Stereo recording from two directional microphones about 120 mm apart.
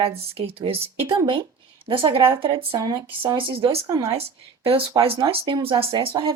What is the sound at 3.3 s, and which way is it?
Speech, 45° right (ahead or behind).